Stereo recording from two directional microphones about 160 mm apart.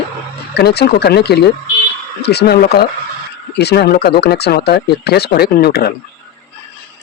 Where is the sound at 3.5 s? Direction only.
90° left.